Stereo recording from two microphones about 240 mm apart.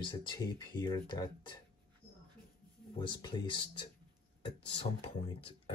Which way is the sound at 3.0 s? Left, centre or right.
Centre.